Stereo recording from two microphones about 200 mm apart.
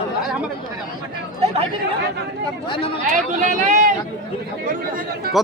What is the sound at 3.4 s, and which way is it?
Speech, 40° right (ahead or behind).